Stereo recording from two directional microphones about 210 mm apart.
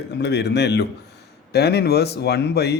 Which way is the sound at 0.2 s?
55° left (ahead or behind).